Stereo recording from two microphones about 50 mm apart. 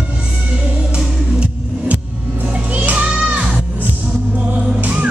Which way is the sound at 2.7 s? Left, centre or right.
Right.